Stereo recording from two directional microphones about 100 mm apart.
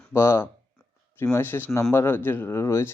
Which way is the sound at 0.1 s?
25° left (ahead or behind).